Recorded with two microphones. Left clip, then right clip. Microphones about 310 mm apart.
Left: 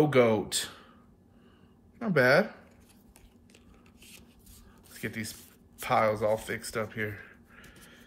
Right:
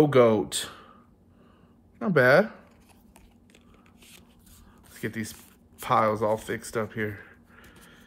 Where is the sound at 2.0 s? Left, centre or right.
Centre.